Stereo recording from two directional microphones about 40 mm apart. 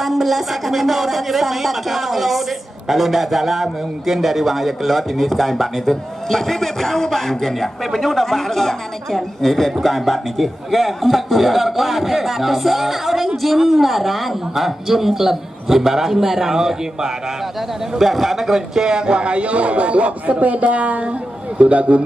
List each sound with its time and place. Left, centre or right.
0.0 s a man's voice: centre; by 22.0 s right